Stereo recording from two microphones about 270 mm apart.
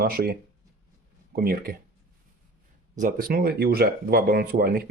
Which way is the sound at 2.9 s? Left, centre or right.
Right.